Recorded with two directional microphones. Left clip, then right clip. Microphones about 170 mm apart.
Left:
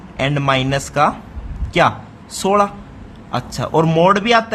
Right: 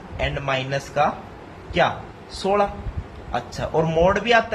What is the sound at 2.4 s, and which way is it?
Speech, 40° left (ahead or behind).